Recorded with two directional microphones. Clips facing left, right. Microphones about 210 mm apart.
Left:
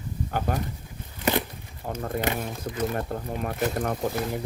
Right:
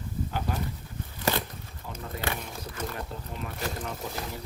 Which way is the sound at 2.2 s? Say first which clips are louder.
Left 5 dB; 20° left (ahead or behind).